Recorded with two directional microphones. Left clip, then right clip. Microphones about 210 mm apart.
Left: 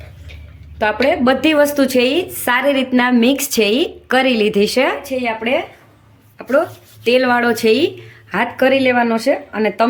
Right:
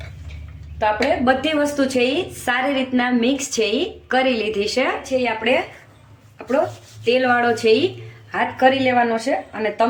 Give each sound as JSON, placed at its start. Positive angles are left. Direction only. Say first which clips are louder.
{"t": 0.8, "sound": "a woman's voice", "louder": "left 3 dB", "side_deg": 55}
{"t": 7.0, "sound": "a woman's voice", "louder": "left 3 dB", "side_deg": 50}